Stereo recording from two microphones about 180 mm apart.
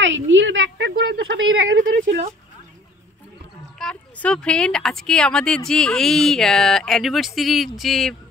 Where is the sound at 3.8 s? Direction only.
5° left (ahead or behind).